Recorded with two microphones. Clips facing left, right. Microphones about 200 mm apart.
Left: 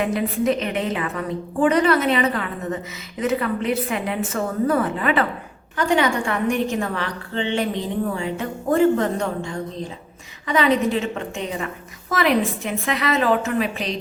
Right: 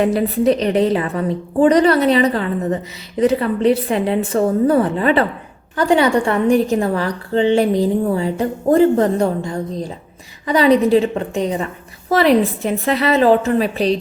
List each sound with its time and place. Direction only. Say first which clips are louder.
0.0 s a woman's voice: right 6 dB; 35° right (ahead or behind)